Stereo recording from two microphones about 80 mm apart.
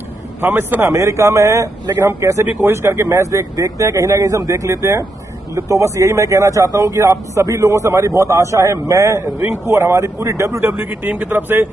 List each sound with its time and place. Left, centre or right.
0.4 s speech: right
0.9 s a man's voice: right
9.4 s a man's voice: right
10.6 s speech: right